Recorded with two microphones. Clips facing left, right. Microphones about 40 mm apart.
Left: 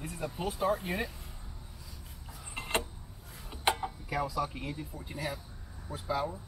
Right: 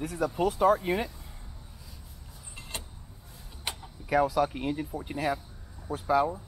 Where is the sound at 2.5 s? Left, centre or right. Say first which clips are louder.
Left 9 dB; left.